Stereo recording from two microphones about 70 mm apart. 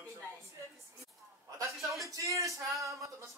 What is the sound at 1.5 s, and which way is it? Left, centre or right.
Speech, right.